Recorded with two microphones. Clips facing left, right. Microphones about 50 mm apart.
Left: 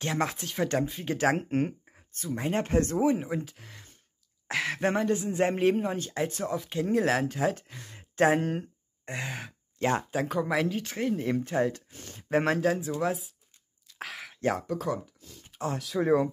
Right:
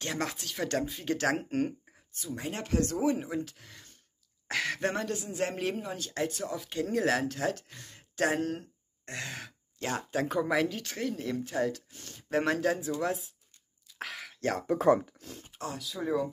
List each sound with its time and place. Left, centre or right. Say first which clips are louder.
0.0 s a man's voice: left 4 dB; centre; by 3.0 s left
3.0 s speech: left 3 dB; centre
5.1 s a man's voice: left 6 dB; left
6.4 s speech: left 4 dB; centre
10.1 s speech: even; centre
11.1 s speech: left 6 dB; left
12.5 s speech: left 2 dB; centre
13.9 s a sound: left 1 dB; centre
15.0 s speech: right 5 dB; right
15.8 s speech: left 7 dB; left